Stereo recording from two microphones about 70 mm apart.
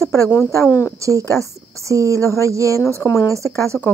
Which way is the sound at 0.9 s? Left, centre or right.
Right.